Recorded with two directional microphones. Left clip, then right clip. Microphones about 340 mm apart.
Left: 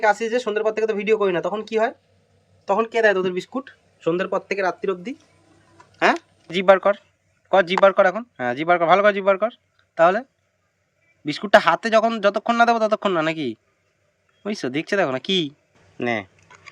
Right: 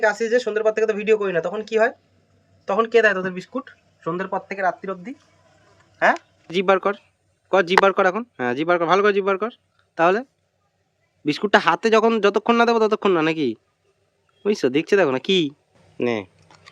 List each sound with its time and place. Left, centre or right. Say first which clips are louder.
0.0 s speech: even; left
2.9 s speech: right 2 dB; left
4.0 s speech: left 3 dB; centre
11.3 s speech: left 2 dB; centre
16.0 s a sound: right 1 dB; centre